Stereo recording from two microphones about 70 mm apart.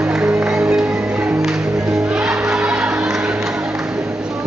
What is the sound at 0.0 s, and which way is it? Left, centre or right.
Music, centre.